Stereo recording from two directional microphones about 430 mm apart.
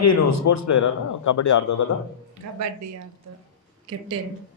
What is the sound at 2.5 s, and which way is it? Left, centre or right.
Speech, right.